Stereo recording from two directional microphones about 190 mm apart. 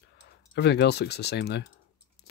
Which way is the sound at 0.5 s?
60° left (ahead or behind).